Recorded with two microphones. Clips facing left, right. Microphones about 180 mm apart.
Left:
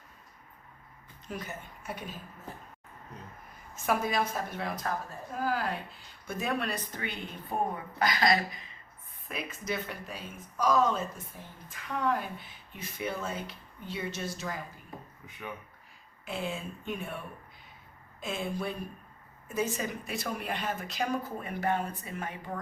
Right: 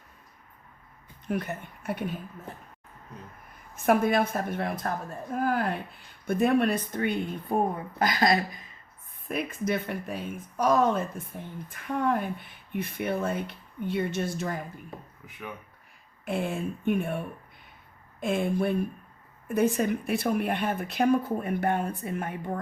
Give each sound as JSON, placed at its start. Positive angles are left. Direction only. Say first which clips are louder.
{"t": 1.3, "sound": "speech", "louder": "right 8 dB", "side_deg": -60}
{"t": 3.8, "sound": "speech", "louder": "right 7 dB", "side_deg": -55}
{"t": 15.2, "sound": "speech", "louder": "right 1 dB", "side_deg": -5}
{"t": 16.2, "sound": "speech", "louder": "right 6 dB", "side_deg": -55}